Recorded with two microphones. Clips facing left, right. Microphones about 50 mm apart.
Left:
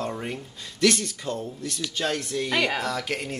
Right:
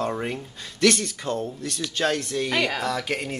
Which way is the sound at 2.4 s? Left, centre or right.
Centre.